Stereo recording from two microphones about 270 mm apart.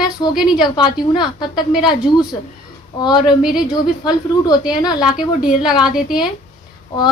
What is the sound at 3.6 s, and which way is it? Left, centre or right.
A woman's voice, centre.